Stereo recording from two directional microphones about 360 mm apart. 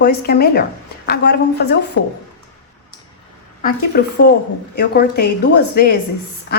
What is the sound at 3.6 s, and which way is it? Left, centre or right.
A woman's voice, left.